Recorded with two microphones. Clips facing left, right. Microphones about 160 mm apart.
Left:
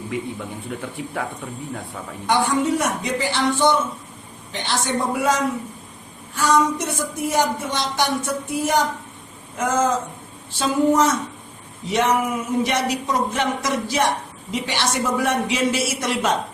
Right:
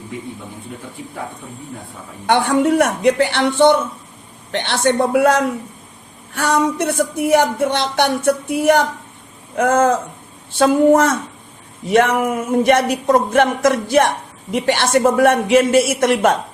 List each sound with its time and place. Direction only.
2.2 s speech: 65° right (ahead or behind)